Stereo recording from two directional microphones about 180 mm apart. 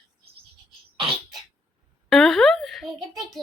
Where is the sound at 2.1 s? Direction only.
Centre (ahead or behind).